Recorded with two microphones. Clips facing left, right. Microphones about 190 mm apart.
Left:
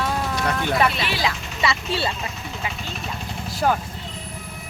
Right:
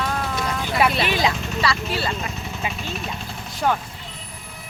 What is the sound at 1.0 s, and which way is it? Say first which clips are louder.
Speech: right 3 dB; 20° right (ahead or behind).